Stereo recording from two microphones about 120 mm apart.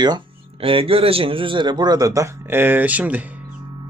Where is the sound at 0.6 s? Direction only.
50° right (ahead or behind); by 3.2 s 10° right (ahead or behind).